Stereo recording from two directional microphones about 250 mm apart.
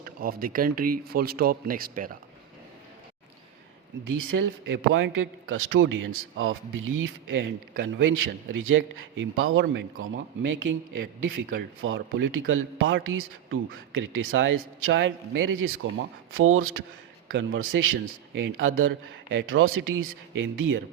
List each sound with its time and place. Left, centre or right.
0.0 s speech: right
4.0 s a man's voice: right
11.0 s speech: right
11.8 s a man's voice: right